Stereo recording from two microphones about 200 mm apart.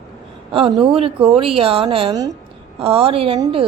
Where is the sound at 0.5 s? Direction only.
25° right (ahead or behind).